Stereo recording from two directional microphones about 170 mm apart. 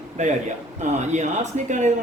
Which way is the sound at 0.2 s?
45° right (ahead or behind).